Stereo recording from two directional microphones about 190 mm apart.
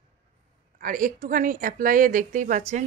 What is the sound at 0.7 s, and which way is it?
Speech, 45° right (ahead or behind).